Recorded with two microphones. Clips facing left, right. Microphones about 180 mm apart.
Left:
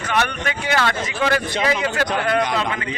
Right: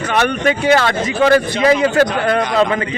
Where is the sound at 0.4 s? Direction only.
30° right (ahead or behind).